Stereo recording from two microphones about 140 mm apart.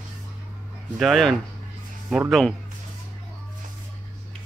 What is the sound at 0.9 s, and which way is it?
Speech, centre (ahead or behind).